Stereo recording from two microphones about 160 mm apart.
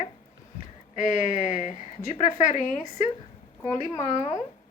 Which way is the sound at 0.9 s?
50° left (ahead or behind).